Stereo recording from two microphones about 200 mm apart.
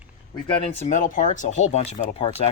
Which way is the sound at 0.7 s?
40° left (ahead or behind).